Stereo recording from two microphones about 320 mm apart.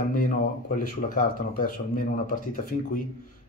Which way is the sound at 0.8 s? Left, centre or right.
Left.